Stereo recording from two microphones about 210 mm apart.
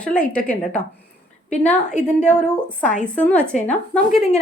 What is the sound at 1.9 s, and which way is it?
Speech, 35° left (ahead or behind).